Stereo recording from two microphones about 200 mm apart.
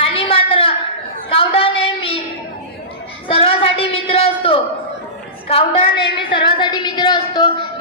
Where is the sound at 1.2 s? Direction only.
25° left (ahead or behind).